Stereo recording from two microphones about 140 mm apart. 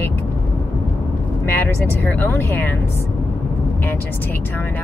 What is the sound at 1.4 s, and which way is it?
Speech, 15° left (ahead or behind).